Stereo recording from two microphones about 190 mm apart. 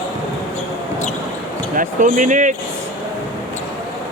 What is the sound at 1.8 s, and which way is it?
Speech, 45° right (ahead or behind).